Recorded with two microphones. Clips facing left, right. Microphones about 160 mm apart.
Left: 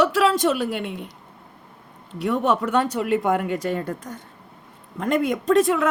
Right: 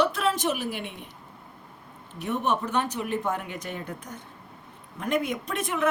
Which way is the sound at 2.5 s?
90° left.